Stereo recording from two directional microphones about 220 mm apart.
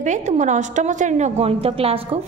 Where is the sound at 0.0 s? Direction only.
35° right (ahead or behind).